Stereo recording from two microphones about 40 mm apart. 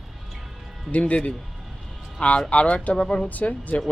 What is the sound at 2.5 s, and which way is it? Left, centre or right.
Speech, left.